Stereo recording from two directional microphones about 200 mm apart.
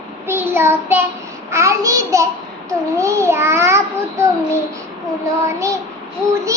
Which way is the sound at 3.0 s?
15° right (ahead or behind).